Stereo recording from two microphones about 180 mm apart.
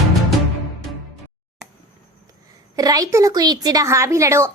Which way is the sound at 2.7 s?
20° right (ahead or behind).